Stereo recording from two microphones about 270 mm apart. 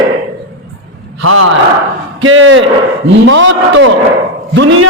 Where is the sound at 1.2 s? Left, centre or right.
Right.